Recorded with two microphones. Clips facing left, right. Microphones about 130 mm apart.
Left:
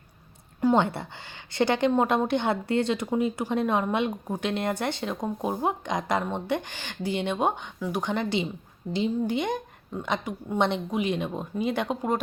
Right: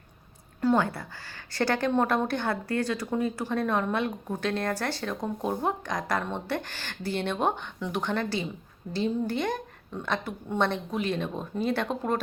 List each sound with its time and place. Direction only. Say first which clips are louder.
0.6 s speech: left 2 dB; 20° left (ahead or behind)